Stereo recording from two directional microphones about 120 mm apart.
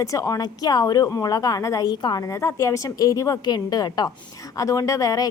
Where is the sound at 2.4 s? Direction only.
20° left (ahead or behind).